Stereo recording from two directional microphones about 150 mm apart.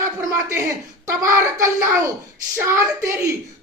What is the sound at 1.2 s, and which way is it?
A woman's voice, 20° right (ahead or behind).